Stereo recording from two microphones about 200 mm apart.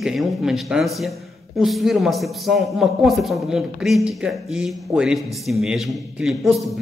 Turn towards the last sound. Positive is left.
turn(degrees=0)  # may be behind; listen again after turning